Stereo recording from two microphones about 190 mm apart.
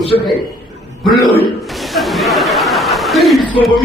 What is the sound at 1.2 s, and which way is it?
Chuckle, centre (ahead or behind).